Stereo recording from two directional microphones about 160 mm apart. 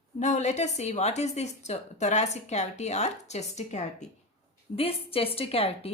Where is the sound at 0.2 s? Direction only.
45° left (ahead or behind).